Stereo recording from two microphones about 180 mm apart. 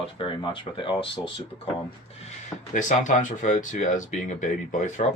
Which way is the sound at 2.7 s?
45° left (ahead or behind).